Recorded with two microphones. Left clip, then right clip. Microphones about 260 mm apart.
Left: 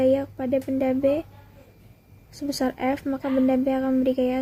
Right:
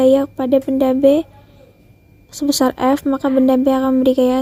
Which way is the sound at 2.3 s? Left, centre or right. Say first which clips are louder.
Right 10 dB; right.